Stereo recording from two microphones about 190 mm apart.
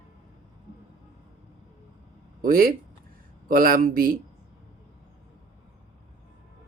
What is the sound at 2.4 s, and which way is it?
Speech, 50° right (ahead or behind).